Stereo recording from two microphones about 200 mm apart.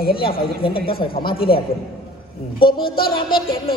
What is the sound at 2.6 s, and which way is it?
Mantra, 50° left (ahead or behind).